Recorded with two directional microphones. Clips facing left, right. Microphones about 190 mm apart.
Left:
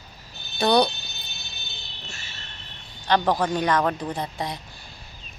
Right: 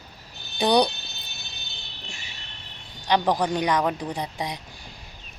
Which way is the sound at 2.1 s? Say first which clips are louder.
Even; 15° right (ahead or behind).